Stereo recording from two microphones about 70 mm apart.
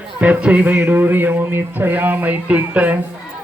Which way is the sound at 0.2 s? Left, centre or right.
Centre.